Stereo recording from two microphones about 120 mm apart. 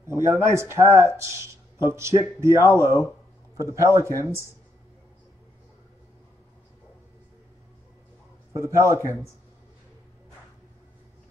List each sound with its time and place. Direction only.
0.0 s speech: 25° right (ahead or behind)
8.5 s speech: 25° right (ahead or behind)